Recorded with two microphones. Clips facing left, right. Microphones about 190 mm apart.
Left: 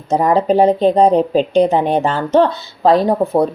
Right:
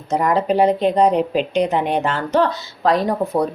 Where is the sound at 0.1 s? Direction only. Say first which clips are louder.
Left 4 dB; 30° left (ahead or behind).